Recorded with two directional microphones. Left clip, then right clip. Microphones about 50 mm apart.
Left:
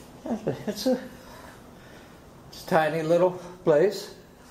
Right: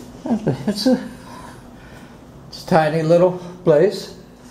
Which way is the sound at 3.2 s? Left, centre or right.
Left.